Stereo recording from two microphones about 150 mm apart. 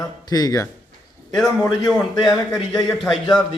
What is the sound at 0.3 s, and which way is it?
Speech, 25° left (ahead or behind).